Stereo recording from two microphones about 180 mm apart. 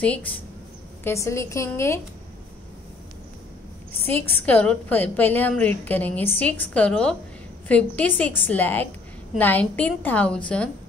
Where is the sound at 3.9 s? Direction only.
10° left (ahead or behind).